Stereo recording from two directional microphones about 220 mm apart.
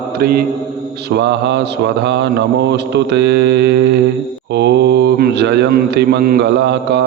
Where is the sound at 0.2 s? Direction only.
45° right (ahead or behind).